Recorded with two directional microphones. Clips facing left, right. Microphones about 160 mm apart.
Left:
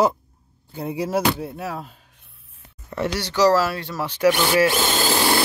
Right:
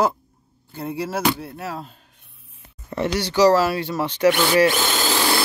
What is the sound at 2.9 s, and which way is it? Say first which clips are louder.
Speech: right 2 dB; centre (ahead or behind).